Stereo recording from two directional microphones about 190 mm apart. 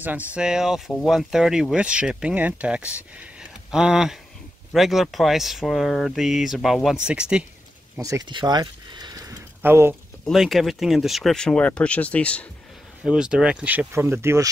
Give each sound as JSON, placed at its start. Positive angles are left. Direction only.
{"t": 0.0, "sound": "speech", "side_deg": -10}
{"t": 8.0, "sound": "speech", "side_deg": -20}
{"t": 10.2, "sound": "speech", "side_deg": 0}